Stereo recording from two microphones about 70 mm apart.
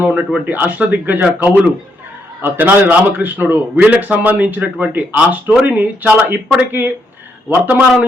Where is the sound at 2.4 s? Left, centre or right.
Right.